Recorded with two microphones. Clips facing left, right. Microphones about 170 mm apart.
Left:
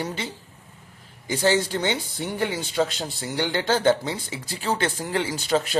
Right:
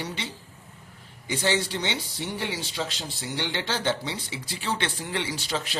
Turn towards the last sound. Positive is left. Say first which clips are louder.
# left 7 dB
turn(degrees=50)  # may be behind; listen again after turning